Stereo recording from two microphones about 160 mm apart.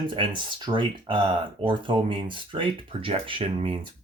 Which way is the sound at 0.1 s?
30° right (ahead or behind).